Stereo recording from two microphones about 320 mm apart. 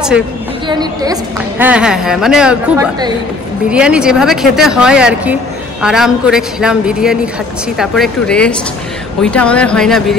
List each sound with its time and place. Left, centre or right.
0.7 s speech: centre